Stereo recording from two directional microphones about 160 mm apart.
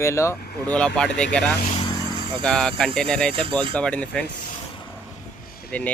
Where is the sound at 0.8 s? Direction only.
5° left (ahead or behind).